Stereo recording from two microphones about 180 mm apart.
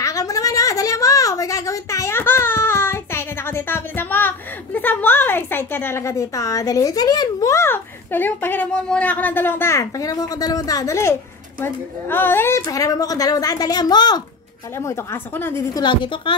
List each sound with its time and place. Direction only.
0.0 s a sound: 20° left (ahead or behind)
11.6 s a woman's voice: 10° left (ahead or behind)
15.8 s a woman's voice: 25° left (ahead or behind)